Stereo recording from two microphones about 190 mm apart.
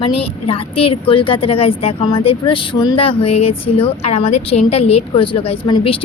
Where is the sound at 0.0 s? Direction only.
30° left (ahead or behind).